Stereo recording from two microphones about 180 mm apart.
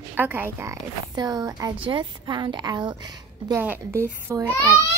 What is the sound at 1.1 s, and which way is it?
A woman's voice, 20° right (ahead or behind).